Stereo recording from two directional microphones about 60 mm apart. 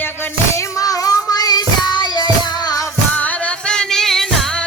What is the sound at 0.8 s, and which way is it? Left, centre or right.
Child singing, left.